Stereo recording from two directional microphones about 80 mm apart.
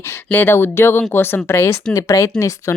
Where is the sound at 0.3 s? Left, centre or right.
Left.